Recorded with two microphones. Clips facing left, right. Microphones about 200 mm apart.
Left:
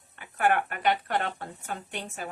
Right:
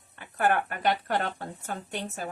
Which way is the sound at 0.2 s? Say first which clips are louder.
Even; 40° right (ahead or behind).